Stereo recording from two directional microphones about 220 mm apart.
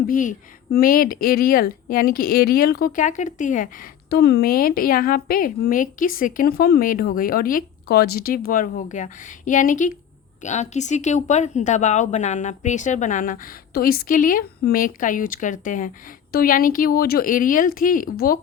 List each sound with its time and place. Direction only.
0.1 s speech: 35° left (ahead or behind)